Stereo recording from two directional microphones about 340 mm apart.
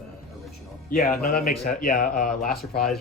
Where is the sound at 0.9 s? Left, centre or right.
Left.